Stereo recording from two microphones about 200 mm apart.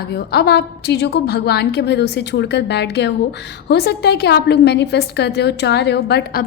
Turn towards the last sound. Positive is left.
turn(degrees=50)  # may be behind; listen again after turning